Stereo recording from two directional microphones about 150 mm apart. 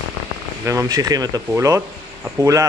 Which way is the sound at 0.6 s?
25° right (ahead or behind).